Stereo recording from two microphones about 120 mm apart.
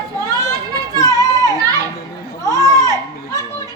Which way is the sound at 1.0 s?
30° left (ahead or behind).